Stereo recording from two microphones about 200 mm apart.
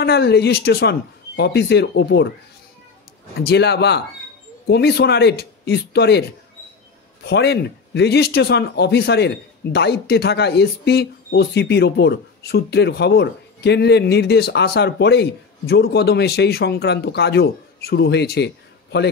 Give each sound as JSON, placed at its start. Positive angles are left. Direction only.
{"t": 0.0, "sound": "speech", "side_deg": 55}
{"t": 3.3, "sound": "speech", "side_deg": 55}
{"t": 7.2, "sound": "speech", "side_deg": 55}